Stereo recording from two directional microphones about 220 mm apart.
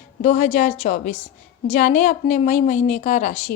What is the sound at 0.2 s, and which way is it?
A woman's voice, 30° left (ahead or behind).